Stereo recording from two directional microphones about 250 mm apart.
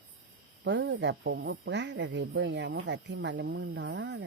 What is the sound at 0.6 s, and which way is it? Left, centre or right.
Speech, right.